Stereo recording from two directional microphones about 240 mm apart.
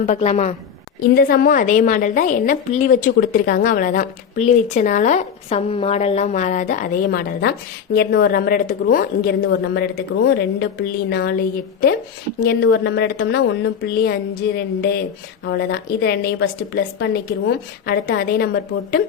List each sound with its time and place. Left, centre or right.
0.0 s a woman's voice: left
1.1 s a woman's voice: left